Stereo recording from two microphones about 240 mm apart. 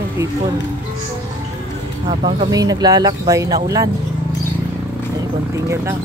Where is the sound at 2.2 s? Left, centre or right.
Centre.